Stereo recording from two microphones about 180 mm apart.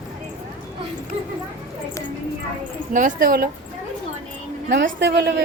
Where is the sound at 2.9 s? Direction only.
50° right (ahead or behind).